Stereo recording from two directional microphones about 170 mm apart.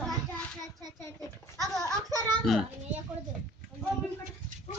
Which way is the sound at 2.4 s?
Centre (ahead or behind).